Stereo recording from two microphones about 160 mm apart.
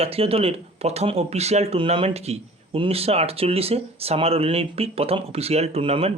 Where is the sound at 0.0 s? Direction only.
35° right (ahead or behind).